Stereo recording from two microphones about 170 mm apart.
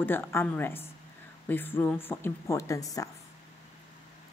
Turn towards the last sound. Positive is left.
turn(degrees=20)  # may be behind; listen again after turning